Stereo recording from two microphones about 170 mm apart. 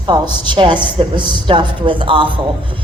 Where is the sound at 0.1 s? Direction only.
30° right (ahead or behind).